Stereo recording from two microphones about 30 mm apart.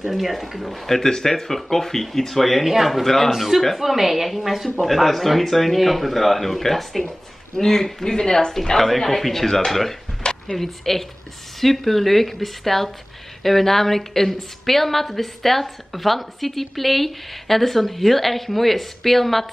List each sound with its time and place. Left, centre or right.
0.0 s a woman's voice: centre
0.8 s a woman's voice: centre
4.8 s a woman's voice: centre; by 8.5 s left
8.7 s a woman's voice: centre
10.2 s a sound: left
10.6 s a woman's voice: centre